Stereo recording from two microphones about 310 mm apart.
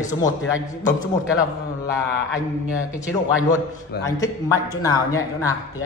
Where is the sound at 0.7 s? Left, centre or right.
Left.